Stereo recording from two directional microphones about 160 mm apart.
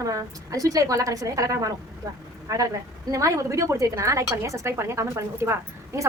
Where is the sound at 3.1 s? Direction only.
20° right (ahead or behind).